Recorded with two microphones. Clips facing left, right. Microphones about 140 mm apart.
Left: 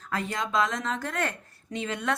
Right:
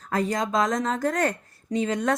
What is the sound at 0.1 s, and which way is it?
Speech, 40° right (ahead or behind).